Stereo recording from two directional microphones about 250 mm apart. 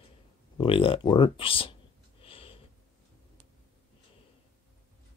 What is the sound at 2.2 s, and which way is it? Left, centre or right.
Sniff, left.